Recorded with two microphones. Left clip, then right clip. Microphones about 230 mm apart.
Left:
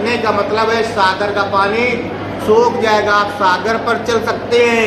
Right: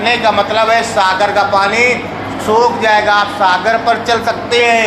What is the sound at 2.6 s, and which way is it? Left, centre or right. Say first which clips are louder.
Speech: right 3 dB; centre.